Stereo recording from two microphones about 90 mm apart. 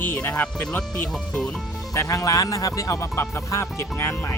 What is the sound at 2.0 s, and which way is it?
Speech, 40° left (ahead or behind).